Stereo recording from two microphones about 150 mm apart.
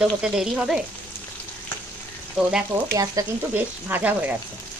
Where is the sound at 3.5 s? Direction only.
10° right (ahead or behind).